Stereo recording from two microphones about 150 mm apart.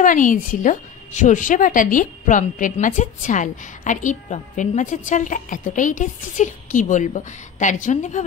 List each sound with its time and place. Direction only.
0.0 s a woman's voice: 60° left (ahead or behind)